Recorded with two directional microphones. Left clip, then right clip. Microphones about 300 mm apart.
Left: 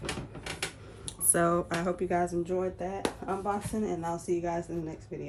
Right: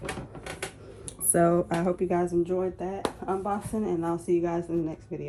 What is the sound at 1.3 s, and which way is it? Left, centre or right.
Speech, centre.